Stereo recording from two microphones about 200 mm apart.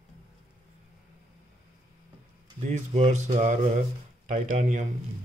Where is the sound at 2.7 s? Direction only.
35° right (ahead or behind).